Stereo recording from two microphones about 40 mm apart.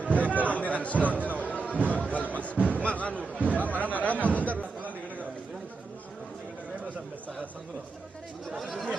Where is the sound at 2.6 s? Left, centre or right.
Left.